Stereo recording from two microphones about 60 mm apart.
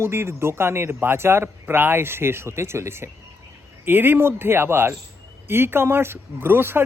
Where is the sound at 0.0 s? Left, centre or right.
Right.